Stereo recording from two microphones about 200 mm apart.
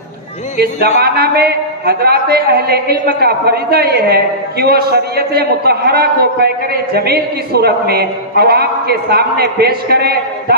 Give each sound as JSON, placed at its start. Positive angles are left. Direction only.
{"t": 0.6, "sound": "a man's voice", "side_deg": -50}